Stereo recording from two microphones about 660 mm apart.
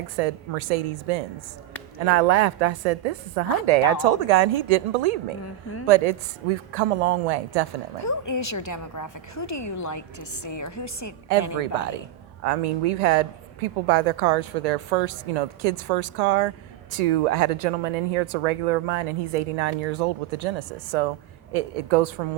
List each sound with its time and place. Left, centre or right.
0.2 s a woman's voice: right
8.0 s a woman's voice: left
12.5 s a woman's voice: right